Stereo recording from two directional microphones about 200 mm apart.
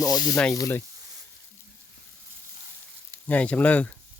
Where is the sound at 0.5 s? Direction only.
15° left (ahead or behind).